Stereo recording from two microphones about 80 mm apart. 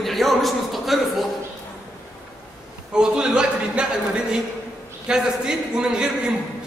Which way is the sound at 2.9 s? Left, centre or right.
Centre.